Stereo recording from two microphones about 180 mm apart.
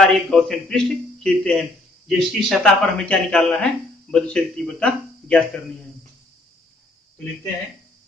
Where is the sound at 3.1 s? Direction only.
5° left (ahead or behind).